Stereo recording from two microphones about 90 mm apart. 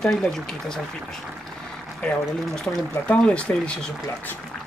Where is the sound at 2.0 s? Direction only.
10° left (ahead or behind).